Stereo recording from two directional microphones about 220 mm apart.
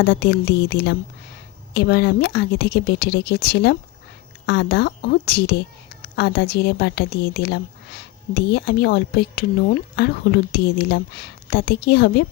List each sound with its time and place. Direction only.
0.0 s a woman's voice: 50° left (ahead or behind)
10.5 s a woman's voice: 45° left (ahead or behind)